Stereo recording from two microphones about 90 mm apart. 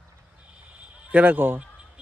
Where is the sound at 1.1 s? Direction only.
20° right (ahead or behind).